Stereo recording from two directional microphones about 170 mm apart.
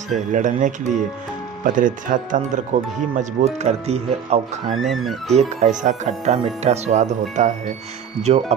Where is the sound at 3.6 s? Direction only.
40° right (ahead or behind).